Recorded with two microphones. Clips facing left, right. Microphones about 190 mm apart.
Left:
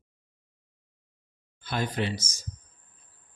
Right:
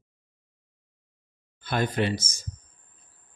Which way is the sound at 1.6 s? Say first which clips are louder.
Right 4 dB; 55° right (ahead or behind).